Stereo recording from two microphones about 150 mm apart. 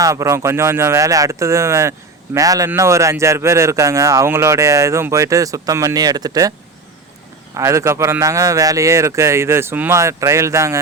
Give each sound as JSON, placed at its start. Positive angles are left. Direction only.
{"t": 0.0, "sound": "speech", "side_deg": -20}
{"t": 7.5, "sound": "speech", "side_deg": -20}